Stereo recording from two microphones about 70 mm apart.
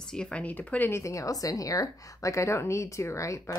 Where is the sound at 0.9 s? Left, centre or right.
Left.